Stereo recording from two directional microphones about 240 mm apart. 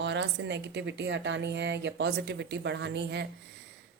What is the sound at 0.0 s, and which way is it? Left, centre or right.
A woman's voice, right.